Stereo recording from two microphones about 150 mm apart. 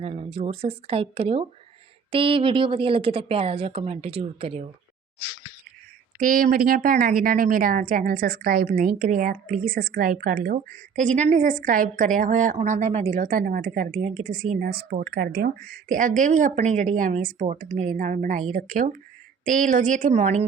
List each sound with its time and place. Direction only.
0.0 s a woman's voice: 40° right (ahead or behind)
6.1 s a woman's voice: 65° right (ahead or behind)
8.6 s a woman's voice: 65° right (ahead or behind)